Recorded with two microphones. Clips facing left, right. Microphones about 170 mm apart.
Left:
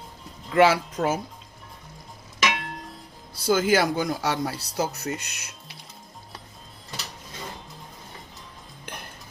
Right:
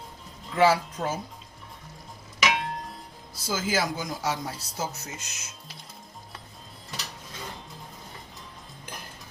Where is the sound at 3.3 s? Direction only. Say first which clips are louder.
Left 7 dB; 60° left (ahead or behind).